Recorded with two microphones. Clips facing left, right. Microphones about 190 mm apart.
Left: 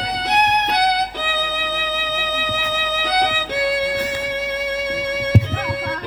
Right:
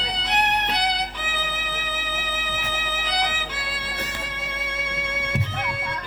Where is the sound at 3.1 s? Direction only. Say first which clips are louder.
Left 8 dB; 50° left (ahead or behind).